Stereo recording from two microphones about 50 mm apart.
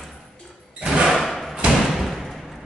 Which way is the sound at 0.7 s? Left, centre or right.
Centre.